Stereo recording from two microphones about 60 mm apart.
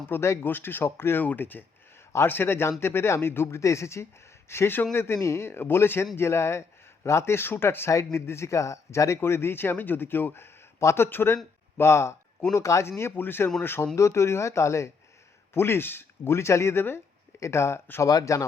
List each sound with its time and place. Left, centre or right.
0.1 s speech: left
1.2 s speech: left
3.6 s speech: left
7.9 s speech: left
13.0 s speech: left
13.9 s speech: left
15.5 s speech: left
18.0 s speech: left